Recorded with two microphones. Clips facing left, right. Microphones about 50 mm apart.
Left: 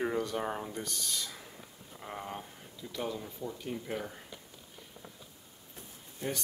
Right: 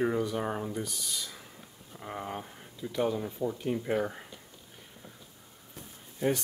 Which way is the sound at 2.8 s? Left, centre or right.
Right.